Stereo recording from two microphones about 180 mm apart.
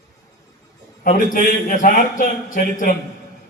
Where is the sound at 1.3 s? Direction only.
50° left (ahead or behind).